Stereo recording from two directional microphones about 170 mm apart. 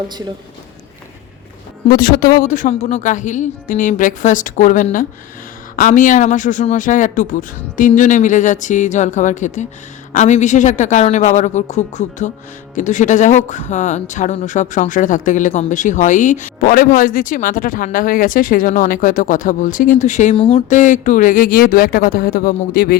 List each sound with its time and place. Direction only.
1.9 s speech: 55° left (ahead or behind)
20.3 s speech: 30° left (ahead or behind)
20.7 s speech: 45° left (ahead or behind)